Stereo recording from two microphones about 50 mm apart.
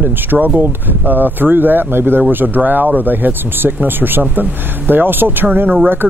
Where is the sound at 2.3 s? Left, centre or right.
Right.